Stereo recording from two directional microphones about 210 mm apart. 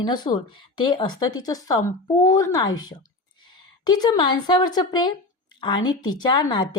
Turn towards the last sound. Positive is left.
turn(degrees=20)  # may be behind; listen again after turning